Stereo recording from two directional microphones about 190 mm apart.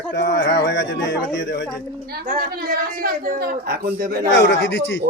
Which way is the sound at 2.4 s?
50° right (ahead or behind).